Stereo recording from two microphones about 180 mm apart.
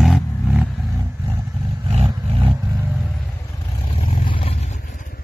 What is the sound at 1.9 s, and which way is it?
Roar, 35° right (ahead or behind).